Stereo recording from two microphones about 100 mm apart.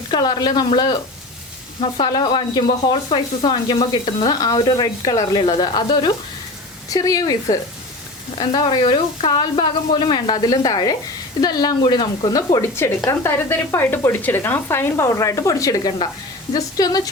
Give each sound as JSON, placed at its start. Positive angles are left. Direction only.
{"t": 0.1, "sound": "speech", "side_deg": 45}
{"t": 2.0, "sound": "speech", "side_deg": 45}
{"t": 6.9, "sound": "a woman's voice", "side_deg": 35}
{"t": 12.3, "sound": "a woman's voice", "side_deg": 40}
{"t": 13.1, "sound": "a woman's voice", "side_deg": 25}